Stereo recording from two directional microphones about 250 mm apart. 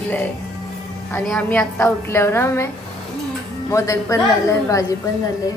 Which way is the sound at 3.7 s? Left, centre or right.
Centre.